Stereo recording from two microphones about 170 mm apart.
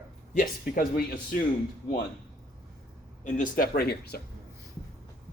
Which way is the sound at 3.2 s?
55° left (ahead or behind).